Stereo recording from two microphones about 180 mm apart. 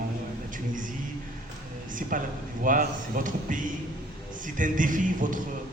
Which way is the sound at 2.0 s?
45° right (ahead or behind).